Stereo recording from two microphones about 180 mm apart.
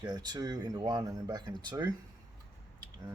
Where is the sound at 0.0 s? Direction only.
20° right (ahead or behind).